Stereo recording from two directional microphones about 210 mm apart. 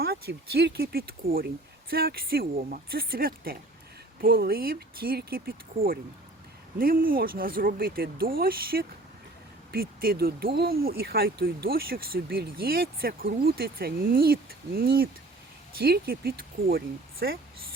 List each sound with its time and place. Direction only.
0.0 s speech: 50° right (ahead or behind)